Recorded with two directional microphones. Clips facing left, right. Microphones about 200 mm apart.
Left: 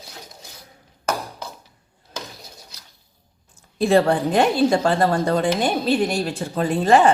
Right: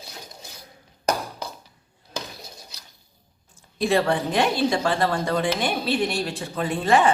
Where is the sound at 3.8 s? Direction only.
40° left (ahead or behind).